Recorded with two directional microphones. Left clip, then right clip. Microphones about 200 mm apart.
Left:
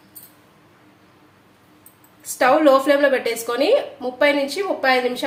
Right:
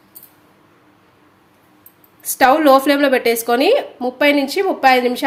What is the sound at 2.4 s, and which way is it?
Speech, 50° right (ahead or behind).